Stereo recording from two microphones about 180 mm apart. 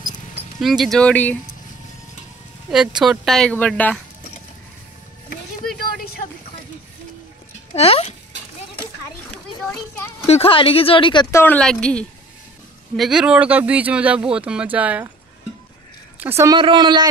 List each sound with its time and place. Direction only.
0.6 s speech: centre (ahead or behind)
3.0 s speech: centre (ahead or behind)
5.8 s a sound: 60° left (ahead or behind)
7.7 s speech: 35° left (ahead or behind)
10.2 s speech: 35° left (ahead or behind)
11.3 s speech: 10° left (ahead or behind); by 15.0 s 10° right (ahead or behind)
16.2 s speech: 15° right (ahead or behind)